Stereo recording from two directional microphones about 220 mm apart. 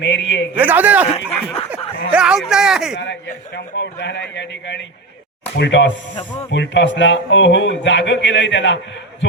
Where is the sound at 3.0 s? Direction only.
55° left (ahead or behind).